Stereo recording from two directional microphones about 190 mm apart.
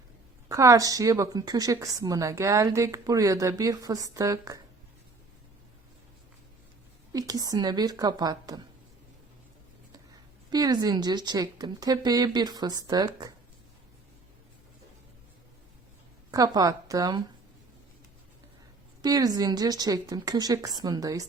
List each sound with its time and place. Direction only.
0.4 s a woman's voice: 15° right (ahead or behind)
7.1 s a woman's voice: 20° right (ahead or behind)
10.5 s a woman's voice: 20° right (ahead or behind)
16.3 s a woman's voice: 20° right (ahead or behind)
19.0 s a woman's voice: 20° right (ahead or behind)